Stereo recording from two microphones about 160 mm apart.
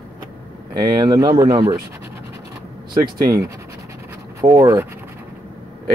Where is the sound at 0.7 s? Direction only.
25° right (ahead or behind).